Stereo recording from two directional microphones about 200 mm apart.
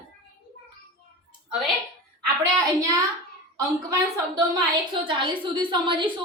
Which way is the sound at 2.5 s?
15° right (ahead or behind).